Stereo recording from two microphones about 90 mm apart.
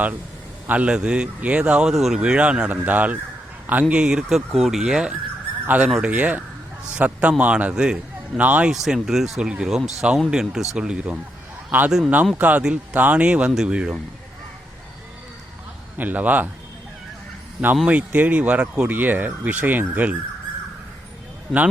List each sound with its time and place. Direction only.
0.7 s speech: 15° right (ahead or behind)
5.6 s speech: 15° right (ahead or behind)
8.7 s speech: 5° right (ahead or behind)
16.0 s a man's voice: 20° right (ahead or behind)
17.8 s speech: 15° right (ahead or behind)